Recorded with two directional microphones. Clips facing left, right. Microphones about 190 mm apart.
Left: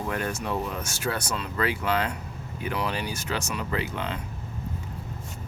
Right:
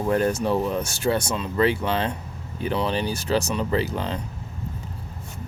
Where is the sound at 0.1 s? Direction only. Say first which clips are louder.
Right 10 dB; 35° right (ahead or behind).